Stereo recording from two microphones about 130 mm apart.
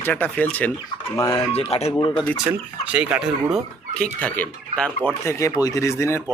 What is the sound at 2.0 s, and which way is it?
Speech, 35° left (ahead or behind).